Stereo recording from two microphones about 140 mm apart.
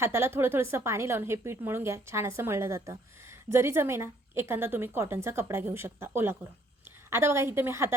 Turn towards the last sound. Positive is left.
turn(degrees=-15)  # may be behind; listen again after turning